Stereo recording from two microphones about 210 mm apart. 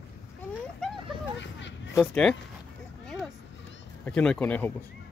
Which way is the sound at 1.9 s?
5° left (ahead or behind).